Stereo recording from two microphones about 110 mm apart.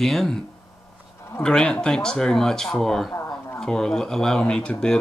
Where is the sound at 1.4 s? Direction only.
5° left (ahead or behind).